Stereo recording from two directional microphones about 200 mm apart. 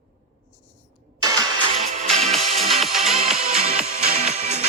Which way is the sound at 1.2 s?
20° right (ahead or behind).